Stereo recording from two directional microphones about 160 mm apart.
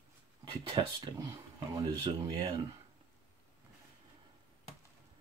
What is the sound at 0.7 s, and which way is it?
Speech, 20° right (ahead or behind).